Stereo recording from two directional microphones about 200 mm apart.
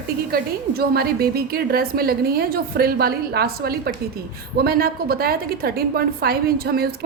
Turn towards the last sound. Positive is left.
turn(degrees=-50)  # may be behind; listen again after turning